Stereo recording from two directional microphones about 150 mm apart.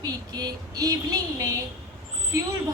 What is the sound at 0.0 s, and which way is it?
Speech, 25° right (ahead or behind).